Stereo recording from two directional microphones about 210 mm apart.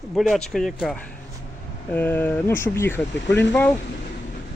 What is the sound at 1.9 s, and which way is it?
Speech, 10° left (ahead or behind).